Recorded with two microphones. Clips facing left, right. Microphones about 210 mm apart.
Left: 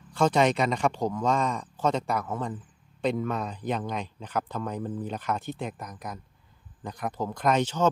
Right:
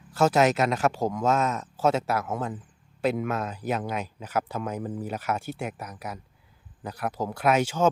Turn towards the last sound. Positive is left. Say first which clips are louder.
# right 2 dB
turn(degrees=-10)  # may be behind; listen again after turning